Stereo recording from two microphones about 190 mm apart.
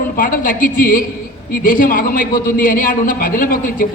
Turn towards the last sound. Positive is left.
turn(degrees=45)  # may be behind; listen again after turning